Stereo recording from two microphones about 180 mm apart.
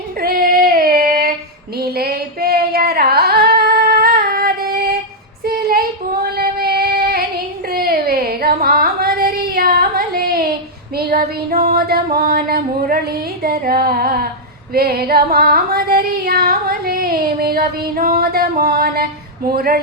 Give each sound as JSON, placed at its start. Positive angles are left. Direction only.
{"t": 0.2, "sound": "female singing", "side_deg": -55}
{"t": 1.8, "sound": "singing", "side_deg": -60}
{"t": 5.5, "sound": "child singing", "side_deg": -60}
{"t": 6.2, "sound": "female singing", "side_deg": -60}
{"t": 7.7, "sound": "a sound", "side_deg": -55}
{"t": 10.9, "sound": "music", "side_deg": -60}
{"t": 13.4, "sound": "female singing", "side_deg": -55}